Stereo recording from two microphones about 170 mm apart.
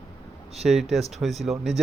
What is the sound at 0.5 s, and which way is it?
Speech, centre (ahead or behind).